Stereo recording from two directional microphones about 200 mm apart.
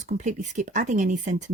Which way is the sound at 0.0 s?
35° right (ahead or behind).